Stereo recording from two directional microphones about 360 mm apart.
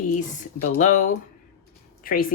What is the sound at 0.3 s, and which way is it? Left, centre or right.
Speech, centre.